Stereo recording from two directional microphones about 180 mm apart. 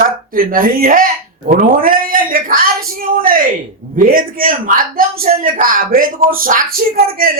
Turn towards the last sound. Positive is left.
turn(degrees=-55)  # may be behind; listen again after turning